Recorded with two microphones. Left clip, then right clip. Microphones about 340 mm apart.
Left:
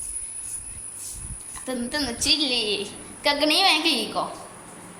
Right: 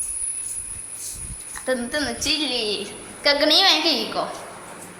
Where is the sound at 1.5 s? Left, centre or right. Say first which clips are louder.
Right 5 dB; centre.